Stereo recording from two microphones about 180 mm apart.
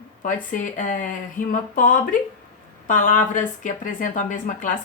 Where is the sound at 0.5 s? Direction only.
45° left (ahead or behind).